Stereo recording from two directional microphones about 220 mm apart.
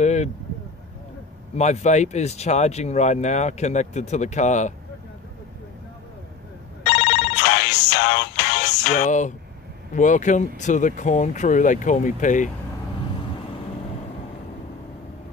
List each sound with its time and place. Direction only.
0.0 s a sound: 30° left (ahead or behind)
1.6 s speech: 30° left (ahead or behind)
6.9 s music: 50° left (ahead or behind)
9.0 s speech: 35° left (ahead or behind)